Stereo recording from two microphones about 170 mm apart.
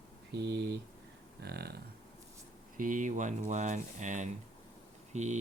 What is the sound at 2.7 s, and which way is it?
Speech, 50° right (ahead or behind).